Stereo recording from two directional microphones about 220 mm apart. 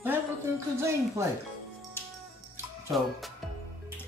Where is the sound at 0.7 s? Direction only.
10° right (ahead or behind).